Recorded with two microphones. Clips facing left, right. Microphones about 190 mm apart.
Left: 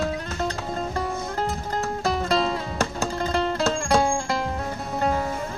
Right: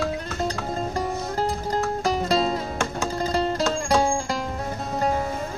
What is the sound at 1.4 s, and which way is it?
Music, 35° right (ahead or behind).